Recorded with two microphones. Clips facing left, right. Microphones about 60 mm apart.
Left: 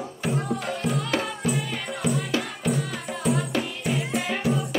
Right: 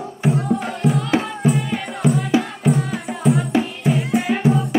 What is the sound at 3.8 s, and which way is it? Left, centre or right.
Music, right.